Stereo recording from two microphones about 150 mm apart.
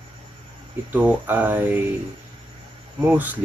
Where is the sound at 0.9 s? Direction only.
10° right (ahead or behind).